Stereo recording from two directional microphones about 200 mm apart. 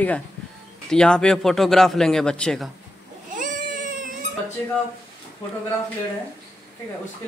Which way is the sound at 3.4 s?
40° right (ahead or behind).